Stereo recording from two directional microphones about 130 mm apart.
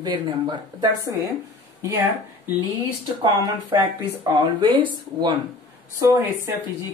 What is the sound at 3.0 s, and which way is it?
Speech, 35° right (ahead or behind).